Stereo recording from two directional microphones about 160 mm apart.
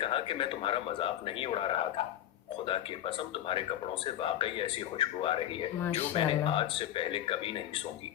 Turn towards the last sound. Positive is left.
turn(degrees=35)  # may be behind; listen again after turning